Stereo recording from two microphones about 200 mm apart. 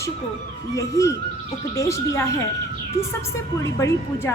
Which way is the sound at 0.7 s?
15° left (ahead or behind).